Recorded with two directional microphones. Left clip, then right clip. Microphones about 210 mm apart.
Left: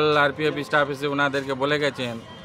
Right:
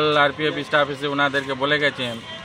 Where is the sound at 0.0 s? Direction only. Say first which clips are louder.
Right 2 dB; 25° left (ahead or behind).